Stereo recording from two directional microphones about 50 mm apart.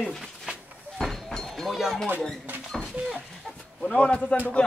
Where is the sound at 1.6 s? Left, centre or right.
Centre.